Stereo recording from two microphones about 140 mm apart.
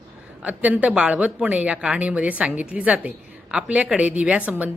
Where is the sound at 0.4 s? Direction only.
10° right (ahead or behind).